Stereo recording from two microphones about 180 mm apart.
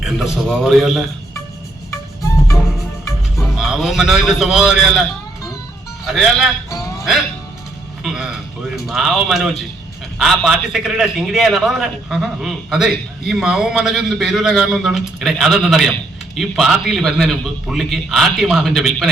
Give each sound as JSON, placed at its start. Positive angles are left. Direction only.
{"t": 0.0, "sound": "a man's voice", "side_deg": 0}
{"t": 1.9, "sound": "music", "side_deg": 15}
{"t": 3.5, "sound": "a man's voice", "side_deg": 0}
{"t": 6.1, "sound": "a man's voice", "side_deg": 0}
{"t": 8.0, "sound": "a man's voice", "side_deg": -5}